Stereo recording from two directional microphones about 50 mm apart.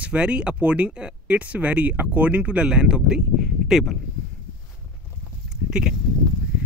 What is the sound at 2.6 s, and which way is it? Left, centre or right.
Speech, centre.